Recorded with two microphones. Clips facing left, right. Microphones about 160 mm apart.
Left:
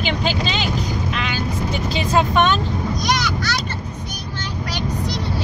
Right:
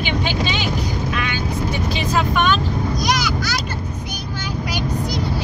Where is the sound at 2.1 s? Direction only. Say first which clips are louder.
Left 2 dB; 25° left (ahead or behind).